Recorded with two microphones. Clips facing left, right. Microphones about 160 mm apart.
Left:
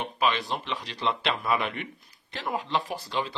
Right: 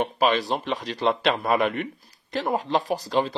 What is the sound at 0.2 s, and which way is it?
Speech, 40° right (ahead or behind).